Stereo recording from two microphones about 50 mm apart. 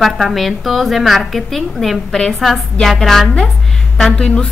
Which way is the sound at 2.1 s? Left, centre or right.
Centre.